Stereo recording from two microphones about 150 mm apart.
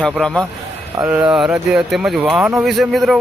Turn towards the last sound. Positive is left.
turn(degrees=0)  # may be behind; listen again after turning